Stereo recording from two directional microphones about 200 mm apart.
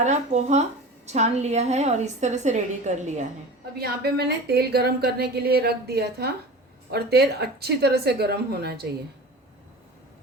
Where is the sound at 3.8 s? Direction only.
50° right (ahead or behind).